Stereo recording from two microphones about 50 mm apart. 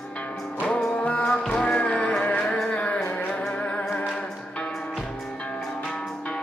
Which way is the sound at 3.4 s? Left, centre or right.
Left.